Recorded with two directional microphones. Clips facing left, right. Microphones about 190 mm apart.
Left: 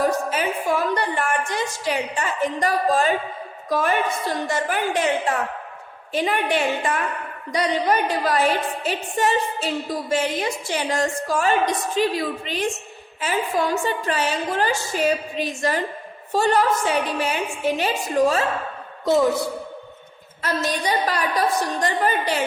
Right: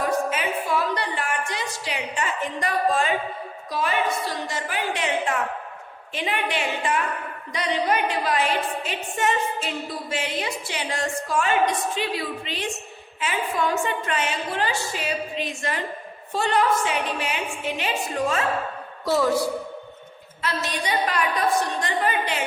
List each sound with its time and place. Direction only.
0.0 s a sound: 40° left (ahead or behind)
0.9 s a woman's voice: 45° left (ahead or behind)
6.1 s a woman's voice: 45° left (ahead or behind)
19.0 s a woman's voice: 20° left (ahead or behind)
20.4 s a woman's voice: 40° left (ahead or behind)